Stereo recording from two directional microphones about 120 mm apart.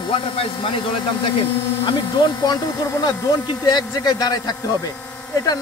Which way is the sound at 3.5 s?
35° left (ahead or behind).